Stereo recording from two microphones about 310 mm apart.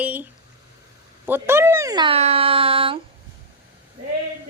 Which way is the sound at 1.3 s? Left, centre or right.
Centre.